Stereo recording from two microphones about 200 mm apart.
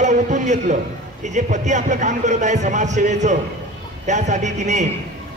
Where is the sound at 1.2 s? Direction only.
35° right (ahead or behind).